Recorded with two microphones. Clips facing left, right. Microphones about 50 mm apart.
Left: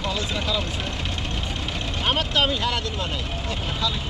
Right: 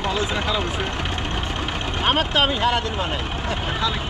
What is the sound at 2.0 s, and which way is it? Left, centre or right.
Speech, right.